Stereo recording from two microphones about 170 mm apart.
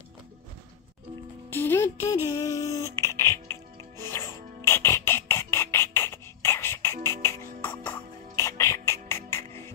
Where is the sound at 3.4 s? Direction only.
15° left (ahead or behind).